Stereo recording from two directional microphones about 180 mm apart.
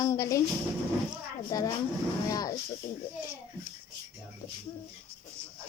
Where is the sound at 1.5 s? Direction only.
20° left (ahead or behind).